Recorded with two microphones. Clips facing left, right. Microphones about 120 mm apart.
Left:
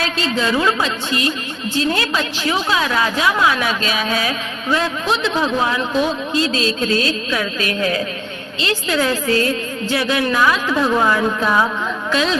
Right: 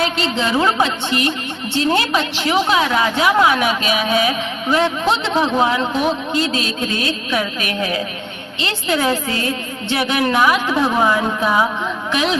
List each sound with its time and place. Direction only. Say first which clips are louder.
0.0 s a woman's voice: right 1 dB; 25° right (ahead or behind)